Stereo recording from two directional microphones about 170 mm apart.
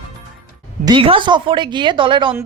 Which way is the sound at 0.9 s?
30° right (ahead or behind).